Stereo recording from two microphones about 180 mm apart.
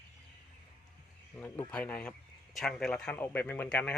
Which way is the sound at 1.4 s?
10° left (ahead or behind).